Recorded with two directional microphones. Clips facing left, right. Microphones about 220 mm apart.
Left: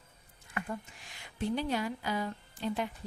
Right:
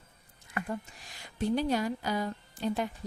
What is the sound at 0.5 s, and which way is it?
A woman's voice, 40° right (ahead or behind).